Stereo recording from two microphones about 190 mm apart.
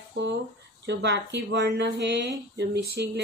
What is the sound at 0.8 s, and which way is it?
Speech, 65° right (ahead or behind).